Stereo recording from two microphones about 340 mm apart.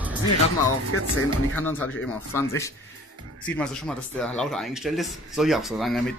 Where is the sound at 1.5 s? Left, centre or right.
Centre.